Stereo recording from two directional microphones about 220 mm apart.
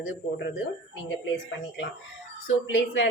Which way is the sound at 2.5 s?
60° left (ahead or behind).